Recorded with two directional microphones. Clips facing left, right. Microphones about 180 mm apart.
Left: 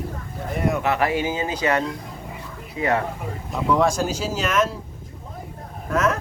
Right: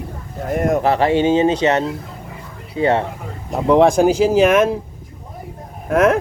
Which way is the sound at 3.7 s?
60° right (ahead or behind).